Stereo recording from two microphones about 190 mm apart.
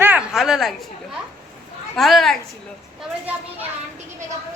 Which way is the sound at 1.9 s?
Centre (ahead or behind).